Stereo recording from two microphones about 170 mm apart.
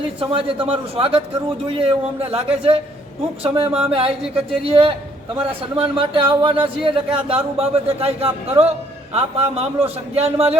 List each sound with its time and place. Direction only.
0.2 s a man's voice: 30° right (ahead or behind)